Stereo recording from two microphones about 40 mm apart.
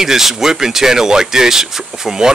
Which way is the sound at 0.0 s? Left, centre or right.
Centre.